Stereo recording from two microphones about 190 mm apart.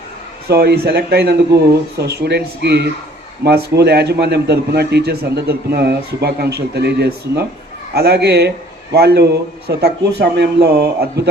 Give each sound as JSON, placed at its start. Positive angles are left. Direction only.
{"t": 0.4, "sound": "speech", "side_deg": -60}